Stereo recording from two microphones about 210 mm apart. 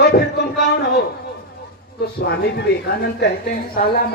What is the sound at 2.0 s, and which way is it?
A woman's voice, 50° left (ahead or behind).